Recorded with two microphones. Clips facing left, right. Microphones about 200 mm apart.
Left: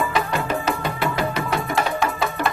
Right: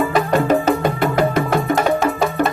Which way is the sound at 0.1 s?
45° right (ahead or behind).